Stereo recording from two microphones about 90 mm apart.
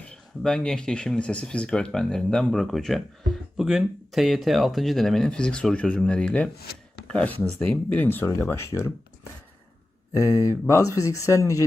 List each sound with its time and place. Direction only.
0.0 s speech: 10° left (ahead or behind); by 8.9 s 30° left (ahead or behind)
10.7 s speech: 40° left (ahead or behind)